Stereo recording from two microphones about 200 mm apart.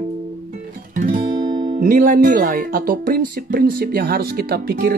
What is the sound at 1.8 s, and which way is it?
Speech, 40° right (ahead or behind).